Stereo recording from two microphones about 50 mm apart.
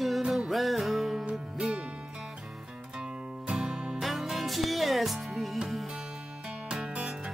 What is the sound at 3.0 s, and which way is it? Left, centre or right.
Music, centre.